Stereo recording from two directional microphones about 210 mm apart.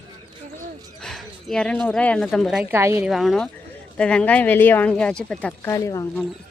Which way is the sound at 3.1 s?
Centre (ahead or behind).